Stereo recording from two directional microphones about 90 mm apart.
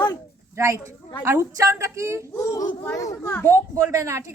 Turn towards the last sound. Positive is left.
turn(degrees=-35)  # may be behind; listen again after turning